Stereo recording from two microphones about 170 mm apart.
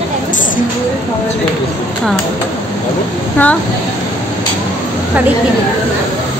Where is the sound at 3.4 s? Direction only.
10° left (ahead or behind).